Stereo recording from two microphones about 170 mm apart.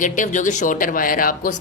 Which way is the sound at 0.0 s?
50° left (ahead or behind).